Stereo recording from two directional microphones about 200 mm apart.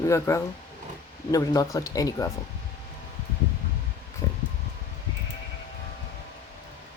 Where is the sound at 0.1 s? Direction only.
15° left (ahead or behind).